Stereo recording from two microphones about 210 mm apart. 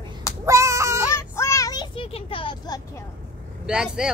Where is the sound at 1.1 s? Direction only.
15° left (ahead or behind).